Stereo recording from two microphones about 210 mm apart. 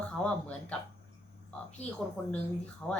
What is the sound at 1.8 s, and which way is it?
Speech, 30° left (ahead or behind).